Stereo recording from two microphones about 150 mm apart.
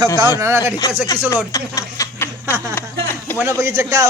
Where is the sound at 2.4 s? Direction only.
15° right (ahead or behind).